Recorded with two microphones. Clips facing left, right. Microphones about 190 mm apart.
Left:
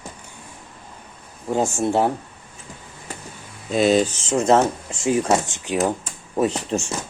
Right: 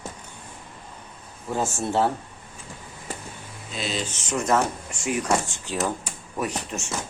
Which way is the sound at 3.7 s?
50° left (ahead or behind).